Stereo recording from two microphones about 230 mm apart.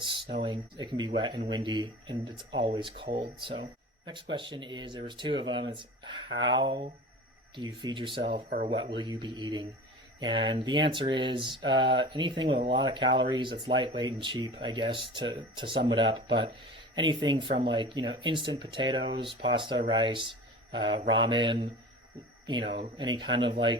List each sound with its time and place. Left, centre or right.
0.0 s a sound: right
0.4 s speech: centre
8.3 s speech: right
8.8 s speech: centre